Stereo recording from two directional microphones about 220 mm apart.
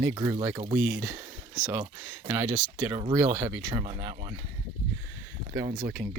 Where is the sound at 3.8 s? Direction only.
30° right (ahead or behind).